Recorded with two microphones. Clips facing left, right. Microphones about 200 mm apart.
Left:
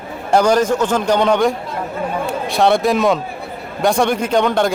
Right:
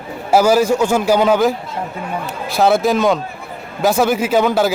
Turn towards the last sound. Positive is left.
turn(degrees=-5)  # may be behind; listen again after turning